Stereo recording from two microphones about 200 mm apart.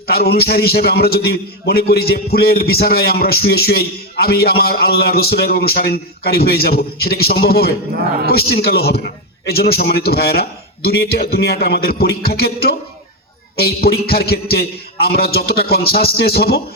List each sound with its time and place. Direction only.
0.1 s a man's voice: 50° left (ahead or behind)